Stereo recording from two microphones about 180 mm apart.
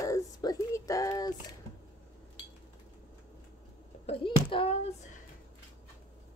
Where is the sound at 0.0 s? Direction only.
20° left (ahead or behind).